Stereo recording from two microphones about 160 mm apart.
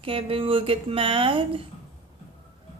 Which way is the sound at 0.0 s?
35° right (ahead or behind).